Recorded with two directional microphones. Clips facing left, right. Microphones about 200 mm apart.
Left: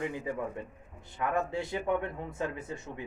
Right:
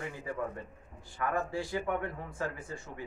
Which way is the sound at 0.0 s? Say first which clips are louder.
Left 3 dB; 20° left (ahead or behind).